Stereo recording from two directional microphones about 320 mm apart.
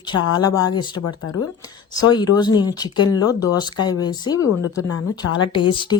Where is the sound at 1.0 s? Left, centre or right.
Left.